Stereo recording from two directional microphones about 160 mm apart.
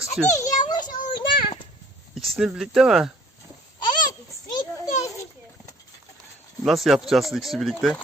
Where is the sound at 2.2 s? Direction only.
Centre (ahead or behind).